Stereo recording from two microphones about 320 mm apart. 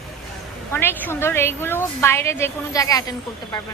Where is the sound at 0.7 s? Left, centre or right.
Centre.